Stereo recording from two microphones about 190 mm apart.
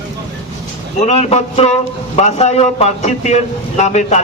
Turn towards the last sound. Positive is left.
turn(degrees=35)  # may be behind; listen again after turning